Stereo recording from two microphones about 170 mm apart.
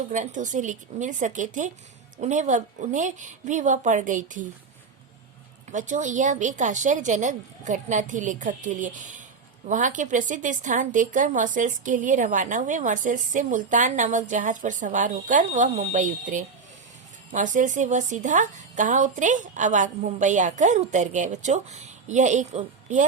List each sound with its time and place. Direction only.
0.1 s a woman's voice: 45° right (ahead or behind)
5.7 s a woman's voice: 45° right (ahead or behind)